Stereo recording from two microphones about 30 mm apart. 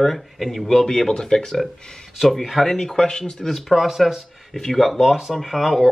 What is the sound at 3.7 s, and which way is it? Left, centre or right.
Speech, centre.